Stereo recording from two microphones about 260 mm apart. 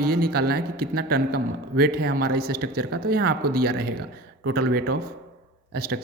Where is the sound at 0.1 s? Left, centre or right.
Right.